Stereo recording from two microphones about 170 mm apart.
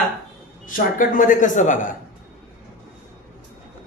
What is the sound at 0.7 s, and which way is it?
A man's voice, 50° left (ahead or behind).